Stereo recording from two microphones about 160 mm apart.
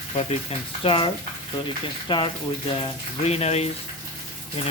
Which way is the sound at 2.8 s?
40° left (ahead or behind).